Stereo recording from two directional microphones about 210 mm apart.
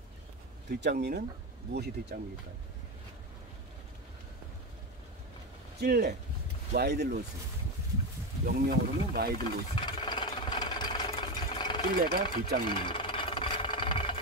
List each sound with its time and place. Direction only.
0.7 s speech: 55° right (ahead or behind)
5.8 s speech: 50° right (ahead or behind)
8.5 s speech: 45° right (ahead or behind)
9.4 s a sound: 20° left (ahead or behind)
11.5 s engine: 20° left (ahead or behind)
12.0 s speech: 50° right (ahead or behind)
12.6 s engine: 25° left (ahead or behind)